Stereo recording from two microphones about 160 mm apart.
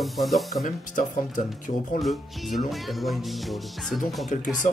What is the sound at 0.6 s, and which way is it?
Speech, 55° left (ahead or behind).